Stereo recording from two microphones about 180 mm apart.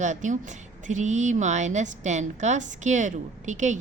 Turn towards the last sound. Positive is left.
turn(degrees=-40)  # may be behind; listen again after turning